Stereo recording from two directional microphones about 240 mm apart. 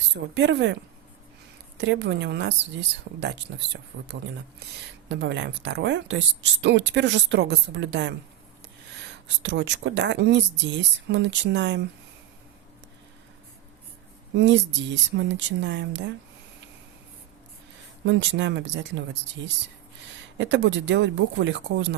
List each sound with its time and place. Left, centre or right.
0.1 s speech: right
1.8 s speech: right
14.3 s speech: right
18.0 s speech: right
20.4 s speech: right